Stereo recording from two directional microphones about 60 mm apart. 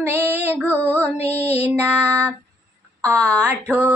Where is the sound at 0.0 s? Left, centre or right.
Right.